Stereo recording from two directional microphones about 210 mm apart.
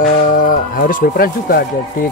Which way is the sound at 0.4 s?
40° left (ahead or behind).